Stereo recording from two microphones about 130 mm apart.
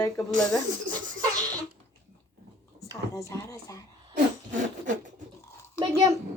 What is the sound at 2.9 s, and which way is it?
Speech, 25° left (ahead or behind).